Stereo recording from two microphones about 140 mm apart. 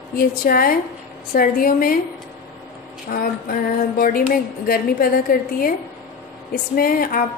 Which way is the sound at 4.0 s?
85° left.